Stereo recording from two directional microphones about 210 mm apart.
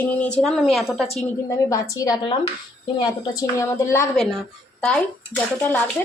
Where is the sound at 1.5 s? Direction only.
15° left (ahead or behind).